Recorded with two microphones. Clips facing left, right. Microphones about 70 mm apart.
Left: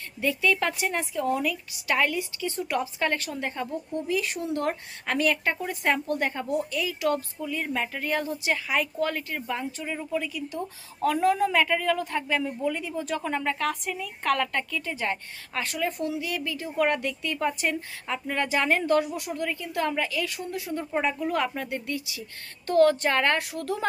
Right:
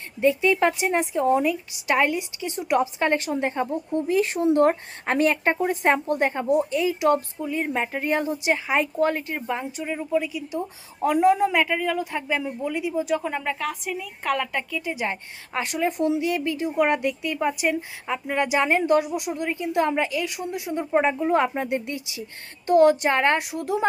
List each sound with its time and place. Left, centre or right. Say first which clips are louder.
0.2 s a woman's voice: right 6 dB; right